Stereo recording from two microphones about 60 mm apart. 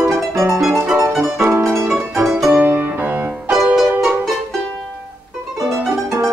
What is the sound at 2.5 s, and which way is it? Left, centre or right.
Music, right.